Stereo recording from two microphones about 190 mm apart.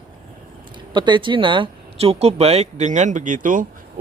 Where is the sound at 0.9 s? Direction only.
25° right (ahead or behind).